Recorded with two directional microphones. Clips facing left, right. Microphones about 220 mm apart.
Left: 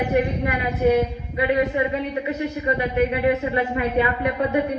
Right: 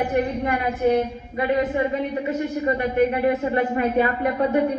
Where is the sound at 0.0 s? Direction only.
45° right (ahead or behind).